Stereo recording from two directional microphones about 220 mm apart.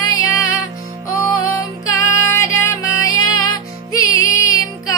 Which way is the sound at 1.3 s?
15° left (ahead or behind).